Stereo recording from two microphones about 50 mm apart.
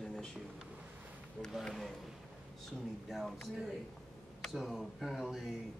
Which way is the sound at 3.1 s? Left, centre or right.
Centre.